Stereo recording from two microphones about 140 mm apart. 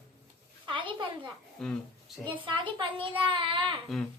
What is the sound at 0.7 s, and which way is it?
Speech, 35° right (ahead or behind).